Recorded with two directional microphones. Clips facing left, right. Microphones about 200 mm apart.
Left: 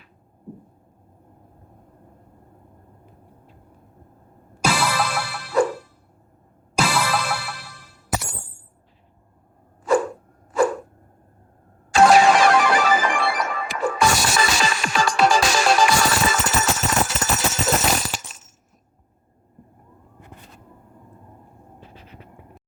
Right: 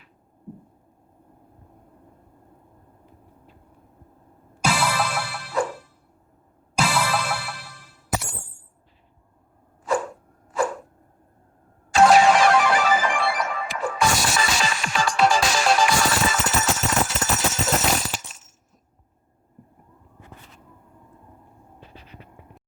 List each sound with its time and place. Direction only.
4.6 s music: 90° left
6.8 s music: 90° left
9.8 s a sound: 85° left
11.9 s music: 90° left